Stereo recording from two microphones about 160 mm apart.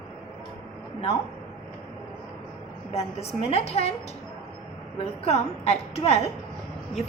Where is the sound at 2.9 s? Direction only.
40° left (ahead or behind).